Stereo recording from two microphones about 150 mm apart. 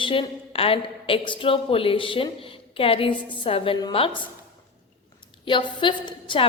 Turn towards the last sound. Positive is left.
turn(degrees=35)  # may be behind; listen again after turning